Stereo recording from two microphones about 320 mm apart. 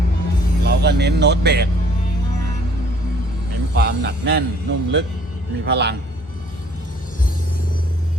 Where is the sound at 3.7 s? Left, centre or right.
Right.